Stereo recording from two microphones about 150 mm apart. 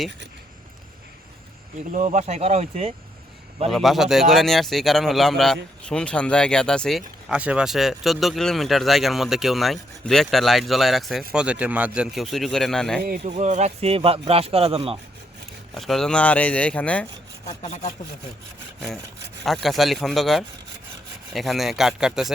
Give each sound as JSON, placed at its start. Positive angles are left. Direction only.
{"t": 1.9, "sound": "speech", "side_deg": -55}
{"t": 3.7, "sound": "speech", "side_deg": 0}
{"t": 13.2, "sound": "a man's voice", "side_deg": -50}
{"t": 15.7, "sound": "speech", "side_deg": 0}
{"t": 17.6, "sound": "speech", "side_deg": 50}
{"t": 19.5, "sound": "speech", "side_deg": 0}